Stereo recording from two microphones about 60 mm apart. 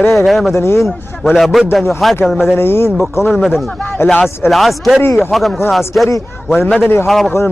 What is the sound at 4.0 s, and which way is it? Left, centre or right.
Speech, left.